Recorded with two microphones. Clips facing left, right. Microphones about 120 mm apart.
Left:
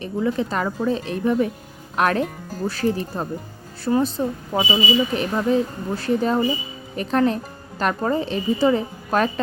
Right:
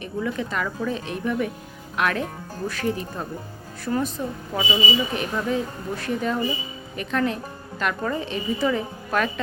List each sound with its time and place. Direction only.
0.0 s speech: 30° left (ahead or behind)